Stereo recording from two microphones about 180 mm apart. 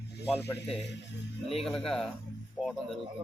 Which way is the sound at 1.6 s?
Centre (ahead or behind).